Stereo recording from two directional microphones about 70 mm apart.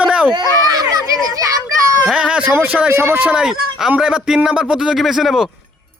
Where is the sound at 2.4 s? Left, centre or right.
Right.